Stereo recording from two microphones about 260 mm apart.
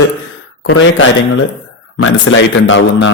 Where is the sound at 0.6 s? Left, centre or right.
Left.